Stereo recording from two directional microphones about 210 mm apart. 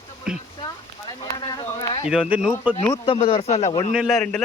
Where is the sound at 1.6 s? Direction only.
15° left (ahead or behind).